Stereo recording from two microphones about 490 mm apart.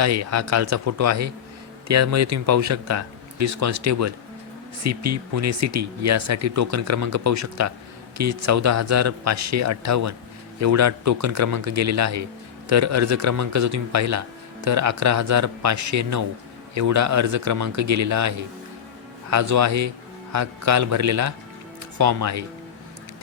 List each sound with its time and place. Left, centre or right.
0.0 s a man's voice: right